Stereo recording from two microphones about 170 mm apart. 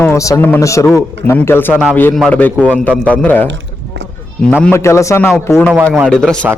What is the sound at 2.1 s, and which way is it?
A man's voice, 5° left (ahead or behind).